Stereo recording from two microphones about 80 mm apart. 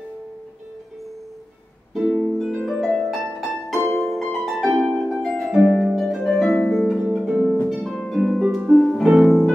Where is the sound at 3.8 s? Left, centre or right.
Left.